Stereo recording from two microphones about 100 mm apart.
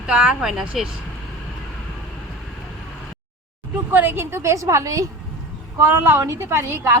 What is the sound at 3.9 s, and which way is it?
A woman's voice, 20° right (ahead or behind).